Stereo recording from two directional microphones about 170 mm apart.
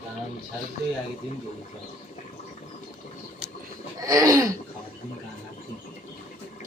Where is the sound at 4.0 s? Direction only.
20° right (ahead or behind).